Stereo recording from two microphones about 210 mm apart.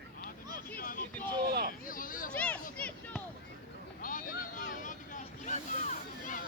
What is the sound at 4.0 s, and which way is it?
Vehicle, 40° left (ahead or behind).